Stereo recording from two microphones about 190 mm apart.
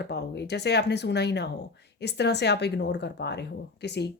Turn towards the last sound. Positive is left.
turn(degrees=60)  # may be behind; listen again after turning